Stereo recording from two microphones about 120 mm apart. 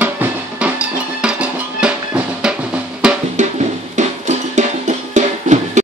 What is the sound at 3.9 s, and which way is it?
Music, 85° right.